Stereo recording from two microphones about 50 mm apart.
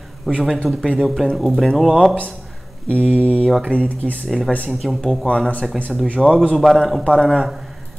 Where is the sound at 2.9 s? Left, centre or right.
Left.